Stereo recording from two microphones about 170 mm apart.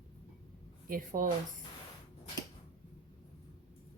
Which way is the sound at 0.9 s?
50° right (ahead or behind).